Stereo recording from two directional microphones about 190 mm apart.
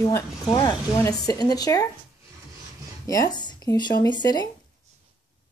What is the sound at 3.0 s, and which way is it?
Speech, 15° left (ahead or behind).